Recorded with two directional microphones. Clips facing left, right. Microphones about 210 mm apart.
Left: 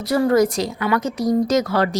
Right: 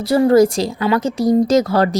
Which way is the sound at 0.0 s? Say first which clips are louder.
Right 5 dB; 30° right (ahead or behind).